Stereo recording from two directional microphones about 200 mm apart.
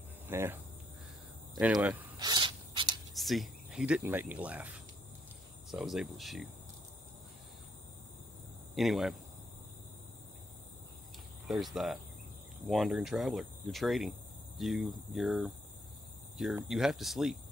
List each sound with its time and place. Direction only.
0.3 s speech: 10° right (ahead or behind)
2.1 s a sound: 20° right (ahead or behind)
3.2 s cricket: centre (ahead or behind)
5.7 s speech: centre (ahead or behind)
8.7 s speech: centre (ahead or behind)
11.4 s speech: centre (ahead or behind)
16.5 s speech: centre (ahead or behind)